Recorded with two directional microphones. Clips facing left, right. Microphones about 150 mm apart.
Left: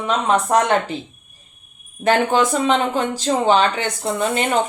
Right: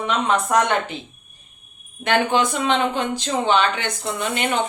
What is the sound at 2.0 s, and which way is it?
Speech, 35° left (ahead or behind).